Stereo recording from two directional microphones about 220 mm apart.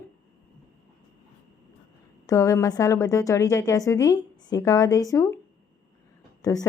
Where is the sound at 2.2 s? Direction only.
15° left (ahead or behind).